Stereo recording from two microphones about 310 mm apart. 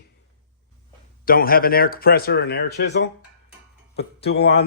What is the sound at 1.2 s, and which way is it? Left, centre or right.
Speech, left.